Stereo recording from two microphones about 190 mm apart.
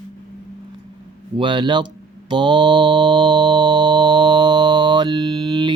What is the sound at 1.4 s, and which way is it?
Mantra, 25° right (ahead or behind).